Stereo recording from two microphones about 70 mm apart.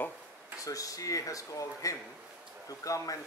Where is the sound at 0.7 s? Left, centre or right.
Left.